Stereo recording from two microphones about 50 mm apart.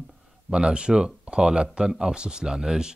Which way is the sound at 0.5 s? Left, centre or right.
Centre.